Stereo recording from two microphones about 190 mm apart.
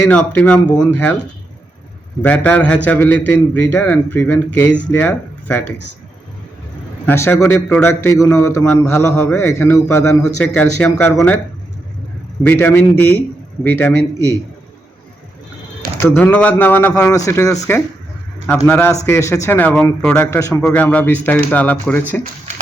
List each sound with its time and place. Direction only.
0.1 s a man's voice: 5° left (ahead or behind)
2.2 s a man's voice: 5° left (ahead or behind)
7.0 s a man's voice: 10° left (ahead or behind)
12.4 s a man's voice: 10° left (ahead or behind)
16.0 s a man's voice: 10° left (ahead or behind)